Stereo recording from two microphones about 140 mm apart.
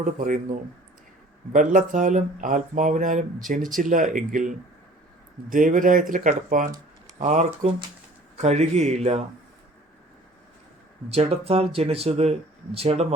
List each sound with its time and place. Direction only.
0.0 s speech: 65° right (ahead or behind)
1.5 s speech: 65° right (ahead or behind)
7.2 s speech: 60° right (ahead or behind)
11.1 s speech: 45° right (ahead or behind)